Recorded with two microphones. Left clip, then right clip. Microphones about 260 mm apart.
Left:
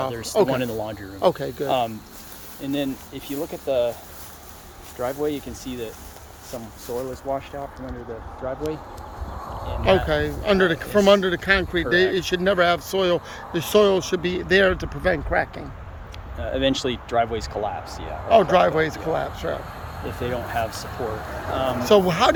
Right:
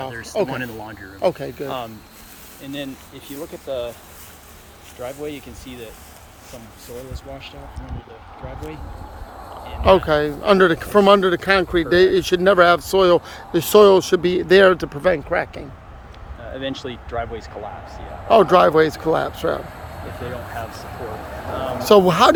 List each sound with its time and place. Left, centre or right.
0.1 s speech: left
1.2 s speech: centre
1.6 s speech: left
2.6 s speech: left
4.9 s speech: left
9.8 s speech: centre
16.5 s speech: left
18.3 s speech: right
21.8 s speech: right